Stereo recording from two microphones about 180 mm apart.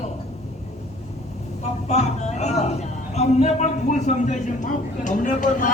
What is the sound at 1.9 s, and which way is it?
A woman's voice, 40° left (ahead or behind).